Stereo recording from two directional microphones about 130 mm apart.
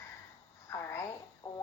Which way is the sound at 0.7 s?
20° left (ahead or behind).